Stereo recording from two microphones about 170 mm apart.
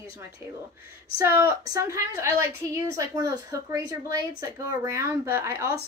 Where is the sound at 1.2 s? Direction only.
20° right (ahead or behind).